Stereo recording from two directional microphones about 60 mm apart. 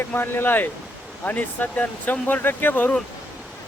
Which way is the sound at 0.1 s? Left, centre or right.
Left.